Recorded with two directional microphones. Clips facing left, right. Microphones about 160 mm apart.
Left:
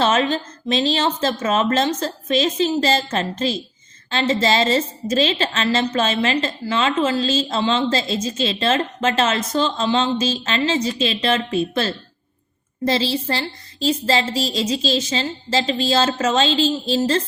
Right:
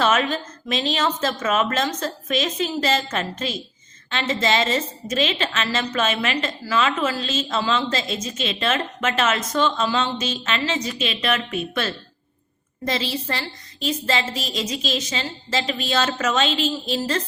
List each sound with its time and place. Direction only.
0.0 s a woman's voice: 30° left (ahead or behind)